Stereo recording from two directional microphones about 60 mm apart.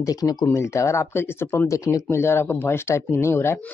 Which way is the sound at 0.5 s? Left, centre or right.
Left.